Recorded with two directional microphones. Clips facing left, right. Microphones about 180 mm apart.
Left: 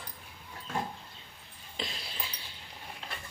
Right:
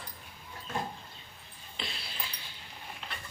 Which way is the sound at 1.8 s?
40° left (ahead or behind).